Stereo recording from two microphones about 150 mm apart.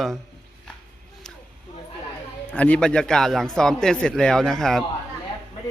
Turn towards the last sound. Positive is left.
turn(degrees=5)  # may be behind; listen again after turning